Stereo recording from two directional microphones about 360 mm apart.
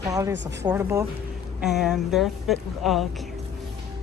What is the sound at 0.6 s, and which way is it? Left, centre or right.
A woman's voice, centre.